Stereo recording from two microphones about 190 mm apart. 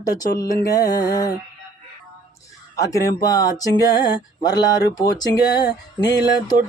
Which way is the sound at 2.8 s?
15° left (ahead or behind).